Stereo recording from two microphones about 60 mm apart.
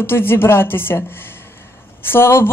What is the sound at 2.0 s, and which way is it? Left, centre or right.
Speech, left.